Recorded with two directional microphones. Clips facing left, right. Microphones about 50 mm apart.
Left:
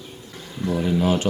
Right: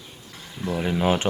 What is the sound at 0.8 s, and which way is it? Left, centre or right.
Speech, right.